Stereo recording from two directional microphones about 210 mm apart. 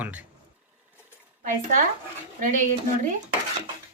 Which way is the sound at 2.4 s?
40° right (ahead or behind).